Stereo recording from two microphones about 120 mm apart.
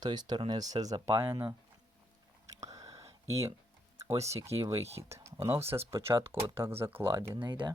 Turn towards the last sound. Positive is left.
turn(degrees=-20)  # may be behind; listen again after turning